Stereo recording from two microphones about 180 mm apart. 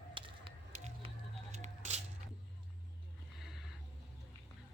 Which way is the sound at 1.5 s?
40° right (ahead or behind).